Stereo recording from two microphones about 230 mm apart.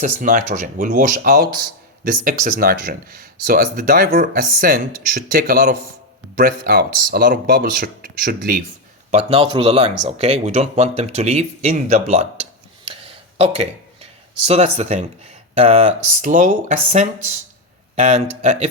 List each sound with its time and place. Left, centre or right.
0.0 s speech: right
9.1 s speech: right
12.8 s a sound: right
15.5 s speech: right